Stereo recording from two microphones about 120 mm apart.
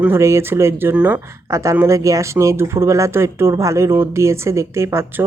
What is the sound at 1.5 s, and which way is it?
Speech, 25° right (ahead or behind).